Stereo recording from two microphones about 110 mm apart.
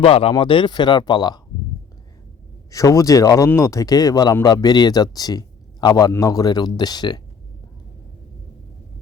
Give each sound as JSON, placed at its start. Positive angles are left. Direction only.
{"t": 0.0, "sound": "speech", "side_deg": 60}
{"t": 2.6, "sound": "speech", "side_deg": 30}